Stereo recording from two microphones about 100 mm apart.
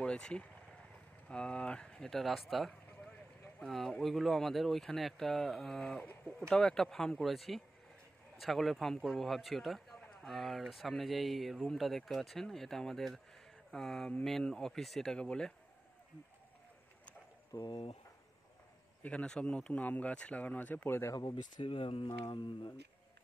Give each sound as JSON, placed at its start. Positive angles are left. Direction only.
{"t": 0.0, "sound": "a man's voice", "side_deg": 10}
{"t": 17.6, "sound": "speech", "side_deg": 50}
{"t": 19.0, "sound": "speech", "side_deg": 10}
{"t": 21.1, "sound": "speech", "side_deg": 40}
{"t": 21.6, "sound": "speech", "side_deg": 65}